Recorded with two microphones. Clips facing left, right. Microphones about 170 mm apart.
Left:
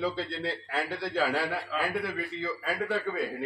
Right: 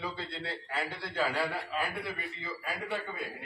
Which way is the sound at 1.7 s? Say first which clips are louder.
Left 5 dB; 90° left.